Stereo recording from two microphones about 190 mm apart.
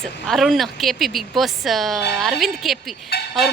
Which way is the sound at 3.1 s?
55° left (ahead or behind).